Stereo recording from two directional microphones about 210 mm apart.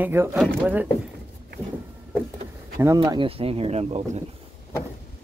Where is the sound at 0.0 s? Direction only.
10° right (ahead or behind).